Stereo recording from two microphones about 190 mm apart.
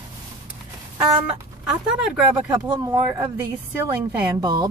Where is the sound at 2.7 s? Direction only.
20° right (ahead or behind).